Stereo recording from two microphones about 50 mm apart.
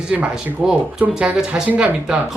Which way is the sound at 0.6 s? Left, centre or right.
Centre.